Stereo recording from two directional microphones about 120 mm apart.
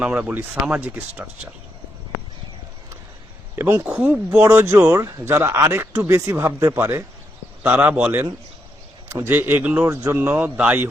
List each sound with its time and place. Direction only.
0.0 s speech: 10° right (ahead or behind)
3.5 s a man's voice: 20° right (ahead or behind)
9.8 s speech: 25° right (ahead or behind)